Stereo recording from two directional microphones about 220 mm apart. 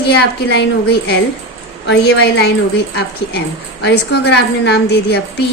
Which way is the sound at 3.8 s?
50° left (ahead or behind).